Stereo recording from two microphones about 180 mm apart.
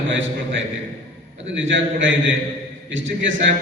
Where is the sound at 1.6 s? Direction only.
90° right.